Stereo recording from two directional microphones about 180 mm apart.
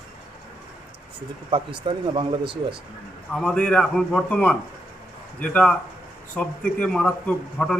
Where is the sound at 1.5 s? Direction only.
30° right (ahead or behind).